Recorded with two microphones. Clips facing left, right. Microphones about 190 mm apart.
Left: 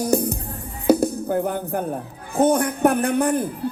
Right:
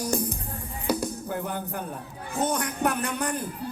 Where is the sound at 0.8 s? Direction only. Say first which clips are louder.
Left 10 dB; 50° left (ahead or behind).